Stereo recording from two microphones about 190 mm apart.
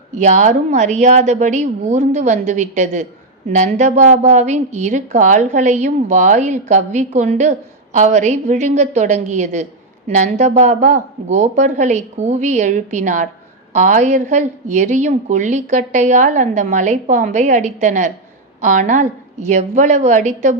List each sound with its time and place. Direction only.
0.1 s a woman's voice: 40° right (ahead or behind)